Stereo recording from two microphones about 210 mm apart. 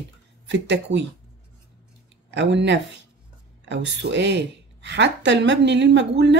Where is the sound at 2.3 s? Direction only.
60° right (ahead or behind).